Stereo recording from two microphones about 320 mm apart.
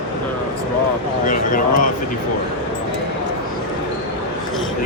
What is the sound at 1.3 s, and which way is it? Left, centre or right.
Speech, left.